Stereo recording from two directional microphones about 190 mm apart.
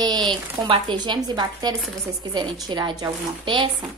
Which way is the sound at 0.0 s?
20° right (ahead or behind).